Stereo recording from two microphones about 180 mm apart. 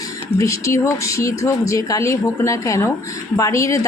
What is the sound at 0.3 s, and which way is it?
A woman's voice, 15° left (ahead or behind).